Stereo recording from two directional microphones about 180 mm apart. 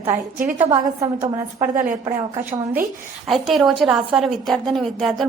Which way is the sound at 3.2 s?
Centre (ahead or behind).